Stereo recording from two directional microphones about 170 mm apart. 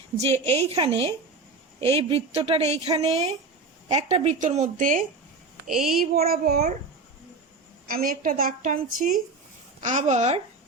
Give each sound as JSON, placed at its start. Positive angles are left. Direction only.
{"t": 0.2, "sound": "a woman's voice", "side_deg": -40}
{"t": 5.6, "sound": "speech", "side_deg": 0}
{"t": 6.0, "sound": "a woman's voice", "side_deg": -60}
{"t": 7.9, "sound": "a woman's voice", "side_deg": -55}